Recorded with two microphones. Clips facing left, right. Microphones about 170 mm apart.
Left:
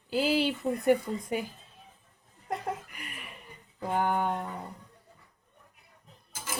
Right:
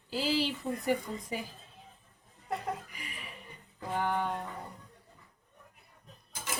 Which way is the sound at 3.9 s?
50° left (ahead or behind).